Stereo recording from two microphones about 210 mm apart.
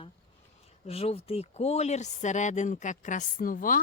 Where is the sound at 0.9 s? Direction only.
30° left (ahead or behind).